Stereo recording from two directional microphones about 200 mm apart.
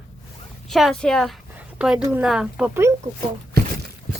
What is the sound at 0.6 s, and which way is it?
Speech, centre (ahead or behind).